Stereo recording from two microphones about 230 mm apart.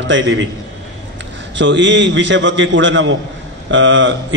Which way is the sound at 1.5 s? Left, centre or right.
Right.